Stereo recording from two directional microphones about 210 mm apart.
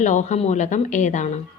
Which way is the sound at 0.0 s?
35° left (ahead or behind).